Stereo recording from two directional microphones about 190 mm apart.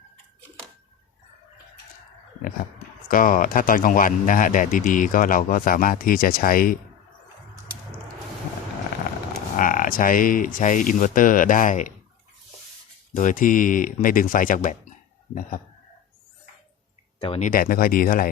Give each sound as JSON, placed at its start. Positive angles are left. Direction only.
{"t": 3.1, "sound": "a man's voice", "side_deg": 45}
{"t": 9.6, "sound": "a man's voice", "side_deg": 45}
{"t": 13.1, "sound": "a man's voice", "side_deg": 45}
{"t": 17.2, "sound": "speech", "side_deg": 30}
{"t": 17.5, "sound": "a man's voice", "side_deg": 50}